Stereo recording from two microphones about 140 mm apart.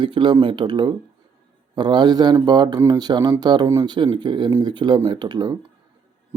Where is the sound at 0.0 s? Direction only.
35° right (ahead or behind).